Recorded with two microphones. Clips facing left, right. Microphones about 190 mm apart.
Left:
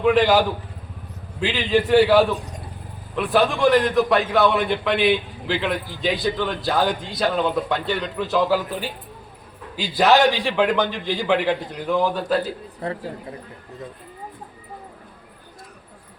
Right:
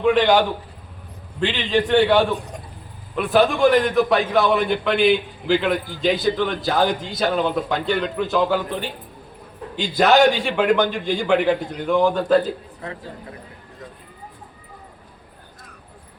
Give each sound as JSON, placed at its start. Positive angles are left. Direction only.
{"t": 0.0, "sound": "a man's voice", "side_deg": 5}
{"t": 12.8, "sound": "a man's voice", "side_deg": 35}